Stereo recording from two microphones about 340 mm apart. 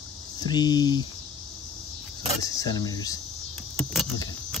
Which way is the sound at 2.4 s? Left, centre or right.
Centre.